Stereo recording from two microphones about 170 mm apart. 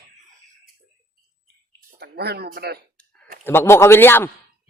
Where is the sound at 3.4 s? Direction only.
15° left (ahead or behind).